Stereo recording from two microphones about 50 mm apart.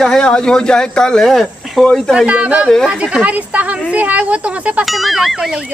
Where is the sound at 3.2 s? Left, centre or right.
Right.